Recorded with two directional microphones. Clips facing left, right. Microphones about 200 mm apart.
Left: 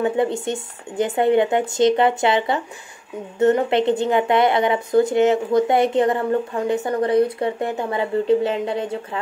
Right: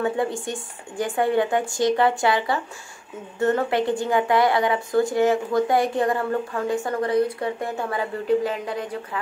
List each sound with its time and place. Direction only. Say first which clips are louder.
0.0 s speech: left 4 dB; 20° left (ahead or behind)